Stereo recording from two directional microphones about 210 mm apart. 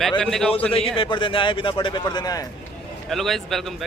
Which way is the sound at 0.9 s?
25° left (ahead or behind).